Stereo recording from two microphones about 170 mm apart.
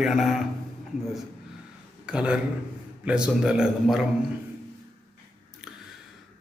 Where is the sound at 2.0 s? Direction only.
5° right (ahead or behind).